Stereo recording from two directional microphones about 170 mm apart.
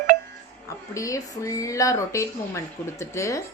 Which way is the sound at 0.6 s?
20° left (ahead or behind).